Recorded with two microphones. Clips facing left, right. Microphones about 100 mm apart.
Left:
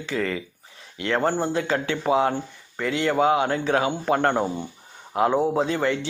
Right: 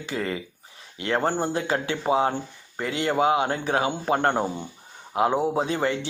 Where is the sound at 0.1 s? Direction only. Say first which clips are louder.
Left 2 dB; 25° right (ahead or behind).